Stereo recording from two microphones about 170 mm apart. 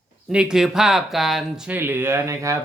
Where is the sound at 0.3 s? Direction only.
5° right (ahead or behind).